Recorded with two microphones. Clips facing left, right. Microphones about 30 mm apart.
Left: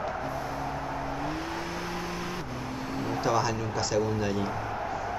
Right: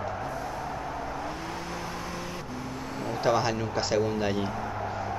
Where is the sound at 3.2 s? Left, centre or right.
Right.